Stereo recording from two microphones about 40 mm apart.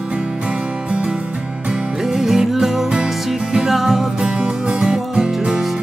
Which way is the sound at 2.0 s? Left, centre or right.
Centre.